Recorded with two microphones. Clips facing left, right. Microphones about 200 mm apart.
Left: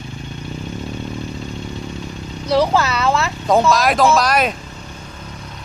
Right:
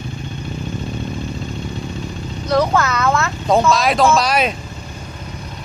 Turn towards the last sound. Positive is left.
turn(degrees=0)  # may be behind; listen again after turning